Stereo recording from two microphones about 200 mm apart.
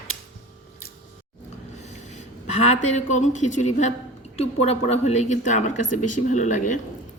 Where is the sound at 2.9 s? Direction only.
35° left (ahead or behind).